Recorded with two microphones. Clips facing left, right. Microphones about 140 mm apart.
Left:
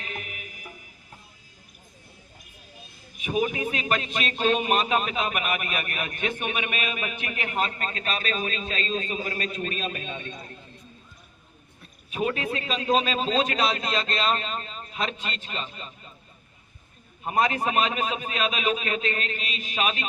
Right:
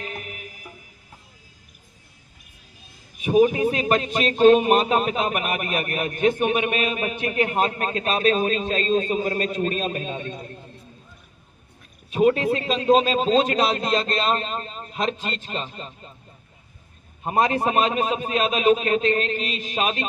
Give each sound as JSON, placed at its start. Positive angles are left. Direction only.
{"t": 0.0, "sound": "music", "side_deg": -40}
{"t": 3.2, "sound": "speech", "side_deg": -40}
{"t": 12.1, "sound": "speech", "side_deg": -35}
{"t": 17.2, "sound": "speech", "side_deg": -35}